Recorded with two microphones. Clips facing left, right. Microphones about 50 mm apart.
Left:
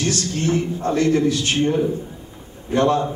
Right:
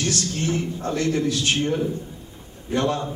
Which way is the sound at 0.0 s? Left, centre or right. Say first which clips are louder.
Left 3 dB; left.